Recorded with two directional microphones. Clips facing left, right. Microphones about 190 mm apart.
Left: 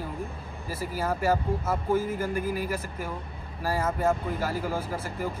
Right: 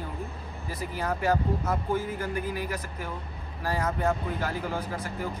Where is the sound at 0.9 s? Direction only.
5° left (ahead or behind).